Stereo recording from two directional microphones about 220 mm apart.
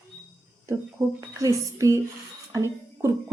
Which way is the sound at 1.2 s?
15° right (ahead or behind).